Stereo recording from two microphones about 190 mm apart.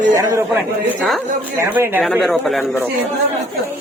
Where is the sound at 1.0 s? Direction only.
Centre (ahead or behind).